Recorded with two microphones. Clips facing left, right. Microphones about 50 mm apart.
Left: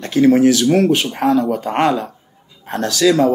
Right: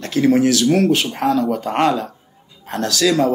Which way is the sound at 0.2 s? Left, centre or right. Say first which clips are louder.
Left 3 dB; centre.